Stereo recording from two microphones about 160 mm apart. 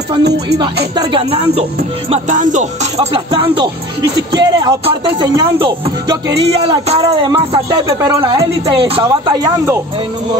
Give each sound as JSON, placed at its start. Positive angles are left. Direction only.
{"t": 0.9, "sound": "speech", "side_deg": -35}
{"t": 2.0, "sound": "music", "side_deg": -45}
{"t": 3.3, "sound": "speech", "side_deg": -30}
{"t": 6.4, "sound": "speech", "side_deg": -40}
{"t": 7.0, "sound": "speech", "side_deg": -25}